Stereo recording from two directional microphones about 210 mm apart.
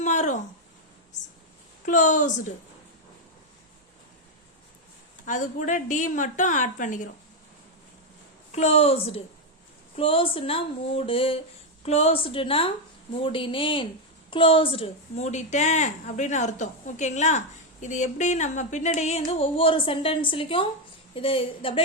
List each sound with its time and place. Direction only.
0.0 s a sound: 35° left (ahead or behind)
1.8 s a woman's voice: 35° left (ahead or behind)
5.2 s a woman's voice: 35° left (ahead or behind)
8.5 s a woman's voice: 30° left (ahead or behind)